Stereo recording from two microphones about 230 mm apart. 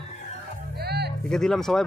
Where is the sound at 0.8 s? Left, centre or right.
Right.